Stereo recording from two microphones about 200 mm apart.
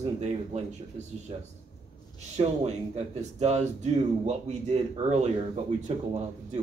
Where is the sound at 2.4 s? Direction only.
35° right (ahead or behind).